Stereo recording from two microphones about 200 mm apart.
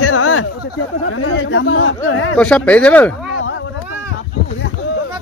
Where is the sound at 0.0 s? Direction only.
90° left.